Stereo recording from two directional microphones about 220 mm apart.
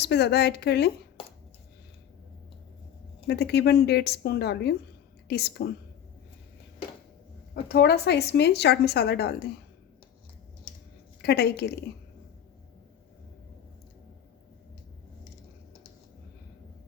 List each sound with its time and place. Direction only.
0.0 s a woman's voice: 50° left (ahead or behind)
3.2 s a woman's voice: 45° left (ahead or behind)
7.5 s a woman's voice: 45° left (ahead or behind)
11.2 s a woman's voice: 45° left (ahead or behind)